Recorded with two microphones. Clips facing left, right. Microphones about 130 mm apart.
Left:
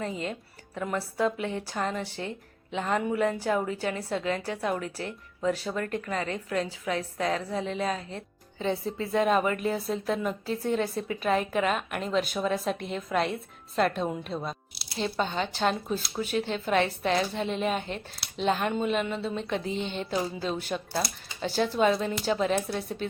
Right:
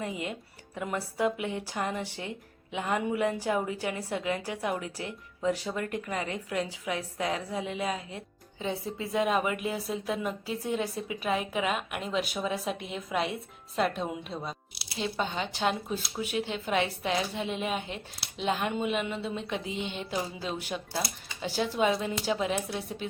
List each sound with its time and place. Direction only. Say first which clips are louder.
0.0 s a woman's voice: left 2 dB; 15° right (ahead or behind)